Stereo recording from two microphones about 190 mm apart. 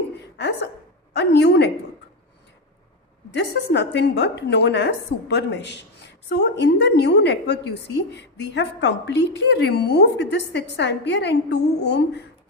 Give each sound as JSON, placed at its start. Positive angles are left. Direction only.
{"t": 0.2, "sound": "a sound", "side_deg": 65}
{"t": 1.1, "sound": "a woman's voice", "side_deg": 65}
{"t": 3.3, "sound": "a woman's voice", "side_deg": 65}